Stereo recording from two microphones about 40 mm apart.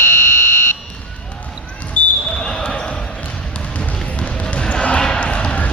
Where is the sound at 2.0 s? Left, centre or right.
Left.